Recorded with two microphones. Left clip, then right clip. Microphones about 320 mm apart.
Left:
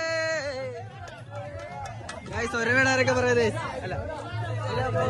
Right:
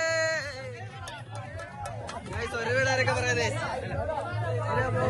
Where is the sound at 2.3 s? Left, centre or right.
Left.